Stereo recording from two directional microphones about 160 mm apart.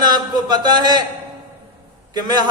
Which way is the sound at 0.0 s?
25° right (ahead or behind).